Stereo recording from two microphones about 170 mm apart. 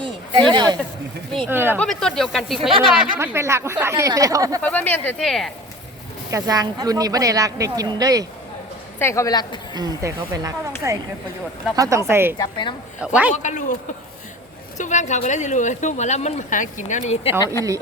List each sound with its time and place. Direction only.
0.5 s speech: 25° right (ahead or behind)
1.5 s speech: 10° right (ahead or behind)
1.8 s speech: 5° left (ahead or behind)
2.6 s speech: 30° right (ahead or behind)
3.2 s speech: 15° right (ahead or behind)
4.6 s speech: 10° left (ahead or behind)
6.3 s speech: 20° right (ahead or behind)
9.0 s a woman's voice: 15° left (ahead or behind)
9.7 s speech: 20° right (ahead or behind)
12.4 s a woman's voice: 25° left (ahead or behind)
13.0 s speech: 10° right (ahead or behind)
13.3 s speech: 45° left (ahead or behind)
14.8 s speech: 45° left (ahead or behind)
17.4 s speech: 20° left (ahead or behind)